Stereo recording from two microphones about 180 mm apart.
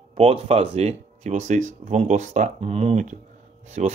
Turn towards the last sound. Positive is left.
turn(degrees=-40)  # may be behind; listen again after turning